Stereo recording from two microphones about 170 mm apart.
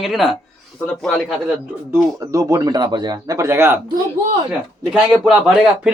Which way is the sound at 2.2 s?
20° right (ahead or behind).